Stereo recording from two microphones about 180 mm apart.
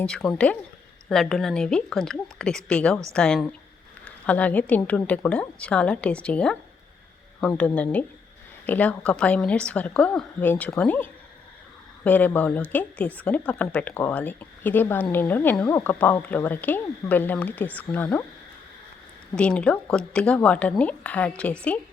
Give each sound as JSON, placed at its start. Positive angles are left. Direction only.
{"t": 0.0, "sound": "a woman's voice", "side_deg": 5}
{"t": 12.0, "sound": "speech", "side_deg": 10}
{"t": 19.4, "sound": "speech", "side_deg": 5}